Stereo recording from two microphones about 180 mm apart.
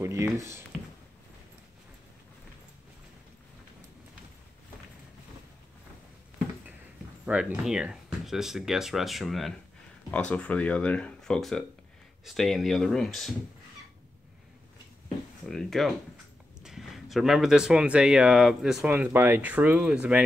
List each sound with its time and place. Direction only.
0.0 s speech: 15° right (ahead or behind)
7.2 s speech: 5° right (ahead or behind)
15.4 s speech: centre (ahead or behind)